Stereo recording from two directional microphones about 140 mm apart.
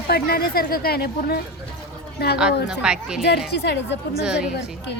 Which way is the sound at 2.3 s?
5° right (ahead or behind).